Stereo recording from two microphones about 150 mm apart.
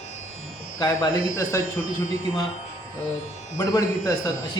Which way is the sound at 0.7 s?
25° left (ahead or behind).